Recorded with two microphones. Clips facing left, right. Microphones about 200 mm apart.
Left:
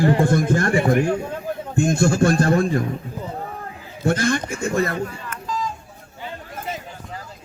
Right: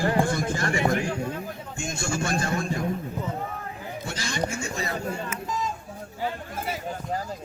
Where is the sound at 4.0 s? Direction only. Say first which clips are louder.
Left 11 dB; 55° left (ahead or behind).